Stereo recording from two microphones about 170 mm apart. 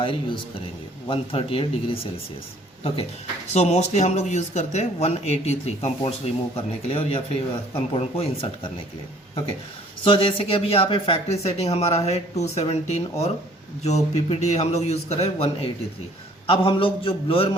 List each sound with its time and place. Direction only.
0.0 s speech: 30° left (ahead or behind)
3.5 s speech: 40° left (ahead or behind)
10.0 s speech: 30° left (ahead or behind)